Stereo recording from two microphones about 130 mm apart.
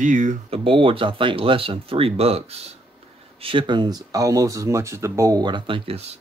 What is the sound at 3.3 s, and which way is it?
Speech, 40° right (ahead or behind).